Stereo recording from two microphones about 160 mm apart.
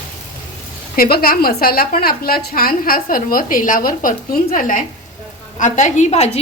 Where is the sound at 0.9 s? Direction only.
70° left (ahead or behind).